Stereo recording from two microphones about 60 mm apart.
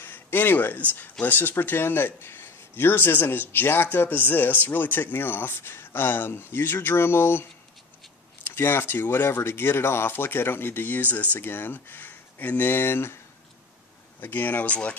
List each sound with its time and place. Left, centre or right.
0.0 s speech: left
8.5 s speech: left
14.2 s speech: left